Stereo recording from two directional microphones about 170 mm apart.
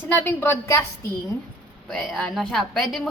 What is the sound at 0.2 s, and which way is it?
Speech, 10° left (ahead or behind).